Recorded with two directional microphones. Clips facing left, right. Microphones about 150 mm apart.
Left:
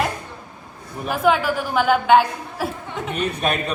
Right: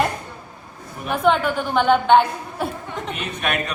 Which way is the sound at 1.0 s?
5° left (ahead or behind).